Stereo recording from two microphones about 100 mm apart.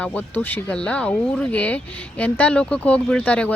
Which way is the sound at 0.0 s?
15° left (ahead or behind).